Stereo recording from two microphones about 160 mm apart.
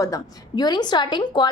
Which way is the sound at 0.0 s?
25° left (ahead or behind).